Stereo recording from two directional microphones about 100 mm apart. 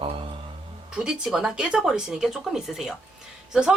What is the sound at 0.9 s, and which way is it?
A woman's voice, 5° right (ahead or behind).